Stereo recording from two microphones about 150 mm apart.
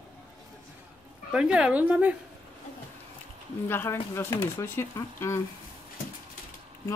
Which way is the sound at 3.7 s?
15° left (ahead or behind).